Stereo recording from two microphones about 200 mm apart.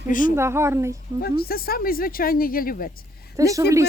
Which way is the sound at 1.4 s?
50° left (ahead or behind).